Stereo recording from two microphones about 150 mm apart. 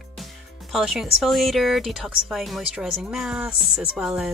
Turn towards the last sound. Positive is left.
turn(degrees=-5)  # may be behind; listen again after turning